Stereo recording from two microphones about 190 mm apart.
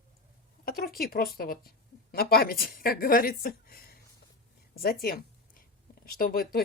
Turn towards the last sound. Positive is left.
turn(degrees=50)  # may be behind; listen again after turning